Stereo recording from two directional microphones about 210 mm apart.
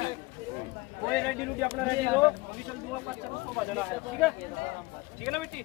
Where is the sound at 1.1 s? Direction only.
5° left (ahead or behind).